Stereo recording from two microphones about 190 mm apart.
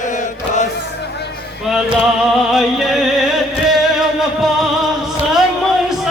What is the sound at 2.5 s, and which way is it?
Music, centre (ahead or behind).